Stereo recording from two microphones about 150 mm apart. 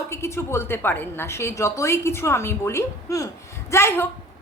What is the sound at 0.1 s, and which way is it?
A woman's voice, 15° left (ahead or behind).